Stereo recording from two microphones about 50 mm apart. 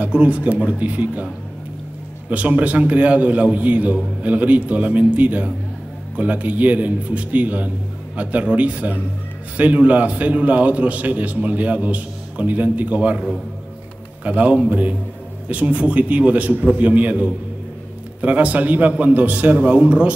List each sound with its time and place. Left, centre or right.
0.0 s a man's voice: right
2.2 s a man's voice: right
14.2 s a man's voice: right